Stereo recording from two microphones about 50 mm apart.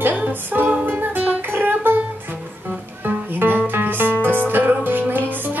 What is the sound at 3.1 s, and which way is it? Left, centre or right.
Music, right.